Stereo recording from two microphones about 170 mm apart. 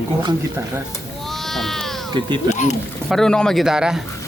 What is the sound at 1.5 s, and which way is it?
Speech, centre (ahead or behind).